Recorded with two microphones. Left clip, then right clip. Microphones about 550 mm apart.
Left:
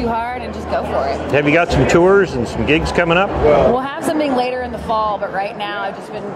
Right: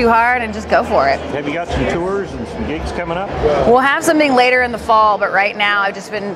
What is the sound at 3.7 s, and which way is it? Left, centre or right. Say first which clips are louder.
Speech: right 6 dB; right.